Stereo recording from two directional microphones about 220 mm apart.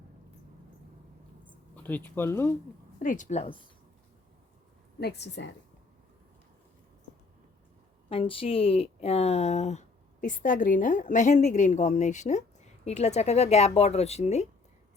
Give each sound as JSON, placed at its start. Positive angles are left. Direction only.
{"t": 1.7, "sound": "speech", "side_deg": 10}
{"t": 3.0, "sound": "speech", "side_deg": 35}
{"t": 4.9, "sound": "a woman's voice", "side_deg": 50}
{"t": 8.1, "sound": "speech", "side_deg": 25}